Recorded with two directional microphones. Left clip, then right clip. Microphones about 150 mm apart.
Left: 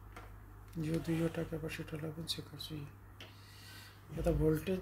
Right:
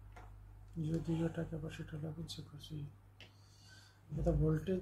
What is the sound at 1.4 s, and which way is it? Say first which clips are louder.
Speech: left 3 dB; 60° left (ahead or behind).